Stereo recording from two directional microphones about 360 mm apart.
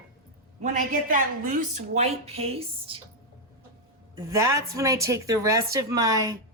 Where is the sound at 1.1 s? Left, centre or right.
Right.